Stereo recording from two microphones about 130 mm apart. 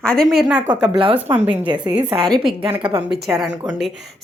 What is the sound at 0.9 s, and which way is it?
A woman's voice, 40° right (ahead or behind).